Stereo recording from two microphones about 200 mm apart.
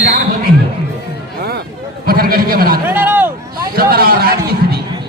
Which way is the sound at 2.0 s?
45° right (ahead or behind).